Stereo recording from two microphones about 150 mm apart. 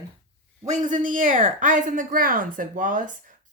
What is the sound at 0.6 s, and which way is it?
Speech, 55° right (ahead or behind).